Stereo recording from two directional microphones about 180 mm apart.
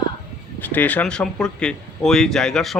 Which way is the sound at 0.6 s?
10° left (ahead or behind).